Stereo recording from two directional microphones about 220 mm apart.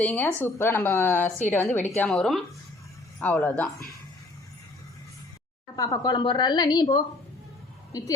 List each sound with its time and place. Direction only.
0.0 s speech: 5° left (ahead or behind)
5.7 s a woman's voice: 15° left (ahead or behind)